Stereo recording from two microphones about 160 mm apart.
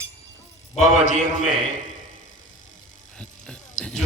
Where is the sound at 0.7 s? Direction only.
50° left (ahead or behind).